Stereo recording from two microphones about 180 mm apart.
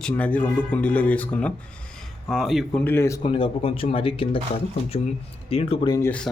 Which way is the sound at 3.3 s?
30° left (ahead or behind).